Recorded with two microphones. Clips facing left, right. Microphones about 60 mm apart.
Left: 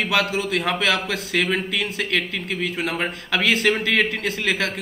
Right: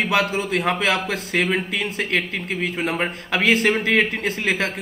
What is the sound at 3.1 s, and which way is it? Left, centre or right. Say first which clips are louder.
Speech: even; right.